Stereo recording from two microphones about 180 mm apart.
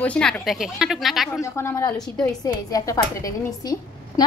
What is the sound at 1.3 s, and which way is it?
A woman's voice, 15° left (ahead or behind).